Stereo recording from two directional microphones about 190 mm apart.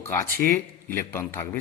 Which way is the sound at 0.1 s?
10° left (ahead or behind).